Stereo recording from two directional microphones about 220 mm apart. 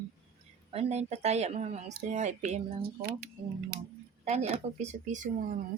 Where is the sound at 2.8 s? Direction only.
45° right (ahead or behind).